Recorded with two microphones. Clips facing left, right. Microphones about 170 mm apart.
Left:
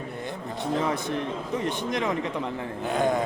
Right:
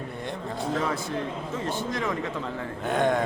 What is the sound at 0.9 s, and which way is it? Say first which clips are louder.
A man's voice: left 2 dB; 20° left (ahead or behind).